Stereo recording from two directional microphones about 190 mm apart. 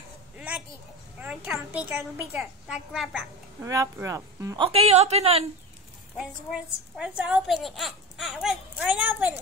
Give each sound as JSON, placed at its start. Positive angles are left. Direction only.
{"t": 0.4, "sound": "a sound", "side_deg": -5}
{"t": 1.2, "sound": "speech", "side_deg": -5}
{"t": 3.6, "sound": "speech", "side_deg": -15}
{"t": 4.6, "sound": "a woman's voice", "side_deg": -30}
{"t": 7.0, "sound": "speech", "side_deg": -5}